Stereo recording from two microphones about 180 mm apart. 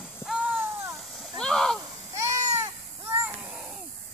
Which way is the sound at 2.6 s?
10° right (ahead or behind).